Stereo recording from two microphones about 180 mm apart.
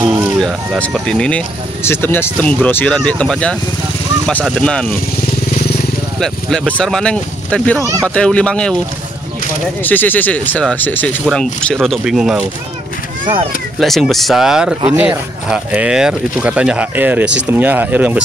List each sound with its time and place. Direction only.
0.4 s speech: 5° left (ahead or behind)
4.6 s speech: 5° left (ahead or behind)
6.1 s speech: centre (ahead or behind)
7.8 s speech: 20° right (ahead or behind)
8.1 s speech: 5° left (ahead or behind)
9.8 s speech: 10° left (ahead or behind)
13.2 s speech: 30° right (ahead or behind)
13.7 s speech: centre (ahead or behind)